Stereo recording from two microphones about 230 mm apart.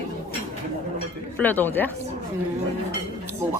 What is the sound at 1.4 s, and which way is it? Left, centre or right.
Speech, centre.